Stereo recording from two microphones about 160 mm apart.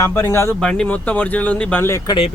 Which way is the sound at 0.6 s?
5° left (ahead or behind).